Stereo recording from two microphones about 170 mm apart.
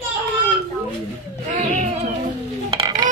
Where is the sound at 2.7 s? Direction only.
25° right (ahead or behind).